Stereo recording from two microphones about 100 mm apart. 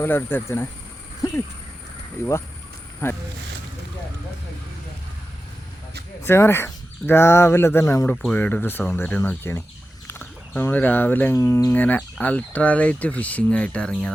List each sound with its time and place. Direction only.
0.0 s speech: 20° left (ahead or behind)
2.2 s speech: 25° left (ahead or behind)
6.2 s speech: 25° left (ahead or behind)
8.1 s speech: 5° left (ahead or behind)
8.4 s speech: 15° left (ahead or behind)
11.3 s speech: 30° left (ahead or behind); by 14.1 s 10° left (ahead or behind)